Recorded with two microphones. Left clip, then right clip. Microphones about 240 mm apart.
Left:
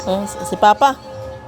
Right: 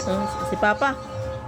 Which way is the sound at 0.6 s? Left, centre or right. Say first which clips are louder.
Left 9 dB; left.